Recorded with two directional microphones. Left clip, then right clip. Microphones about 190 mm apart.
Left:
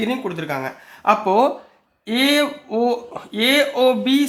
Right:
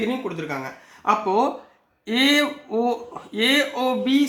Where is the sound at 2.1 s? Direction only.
20° left (ahead or behind).